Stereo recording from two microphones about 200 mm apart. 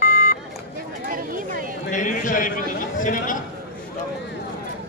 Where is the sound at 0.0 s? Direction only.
45° left (ahead or behind).